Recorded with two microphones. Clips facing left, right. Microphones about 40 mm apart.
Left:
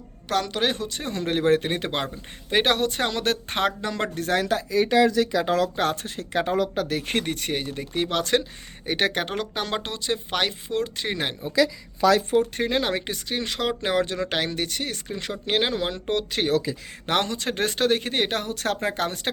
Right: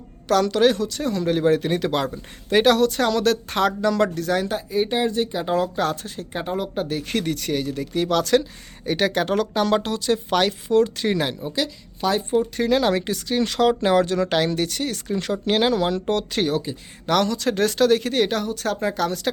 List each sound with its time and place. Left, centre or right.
0.3 s speech: centre
4.2 s speech: left
4.4 s speech: left
7.0 s speech: left
9.2 s speech: centre
12.3 s speech: left
12.6 s speech: left
17.1 s speech: left
18.4 s speech: left